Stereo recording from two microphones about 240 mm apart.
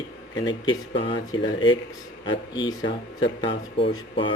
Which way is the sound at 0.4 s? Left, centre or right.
Centre.